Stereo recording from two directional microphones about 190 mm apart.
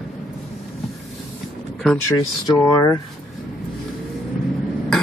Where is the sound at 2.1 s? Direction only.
15° left (ahead or behind).